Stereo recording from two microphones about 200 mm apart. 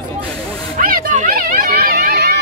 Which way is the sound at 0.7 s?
45° right (ahead or behind).